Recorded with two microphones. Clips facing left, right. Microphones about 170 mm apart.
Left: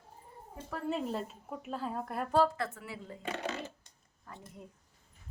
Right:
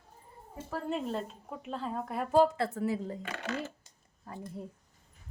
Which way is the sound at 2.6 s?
35° right (ahead or behind).